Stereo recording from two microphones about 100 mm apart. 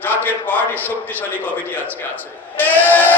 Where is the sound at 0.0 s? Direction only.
20° left (ahead or behind).